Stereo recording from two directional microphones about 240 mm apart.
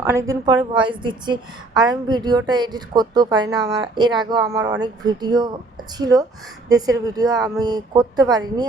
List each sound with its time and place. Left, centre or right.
0.0 s a woman's voice: centre